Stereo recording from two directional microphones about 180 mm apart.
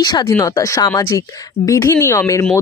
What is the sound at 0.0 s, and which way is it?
Speech, 25° left (ahead or behind).